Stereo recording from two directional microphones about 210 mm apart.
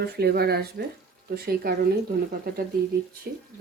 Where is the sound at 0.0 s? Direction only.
50° right (ahead or behind).